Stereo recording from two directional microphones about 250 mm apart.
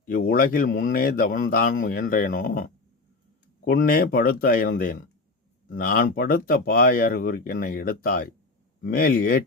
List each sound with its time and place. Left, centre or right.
0.0 s speech: left